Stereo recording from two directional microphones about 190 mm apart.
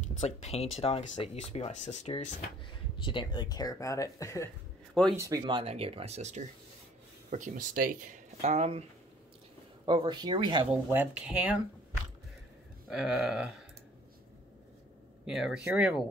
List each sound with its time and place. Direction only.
0.2 s speech: 35° left (ahead or behind)
3.0 s speech: 25° left (ahead or behind)
5.1 s speech: 15° right (ahead or behind); by 8.8 s 35° right (ahead or behind)
9.8 s speech: 25° right (ahead or behind)
10.9 s speech: 10° right (ahead or behind)
12.9 s speech: 5° right (ahead or behind)
15.2 s speech: 5° right (ahead or behind)